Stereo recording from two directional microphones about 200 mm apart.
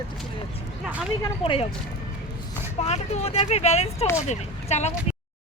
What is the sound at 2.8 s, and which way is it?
Speech, 30° left (ahead or behind).